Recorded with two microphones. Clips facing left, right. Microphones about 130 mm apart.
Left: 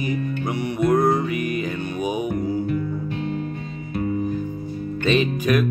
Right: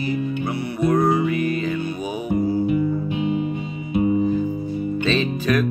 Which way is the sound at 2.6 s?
10° right (ahead or behind).